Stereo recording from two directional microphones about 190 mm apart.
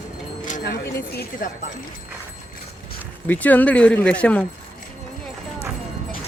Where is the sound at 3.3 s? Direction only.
10° left (ahead or behind).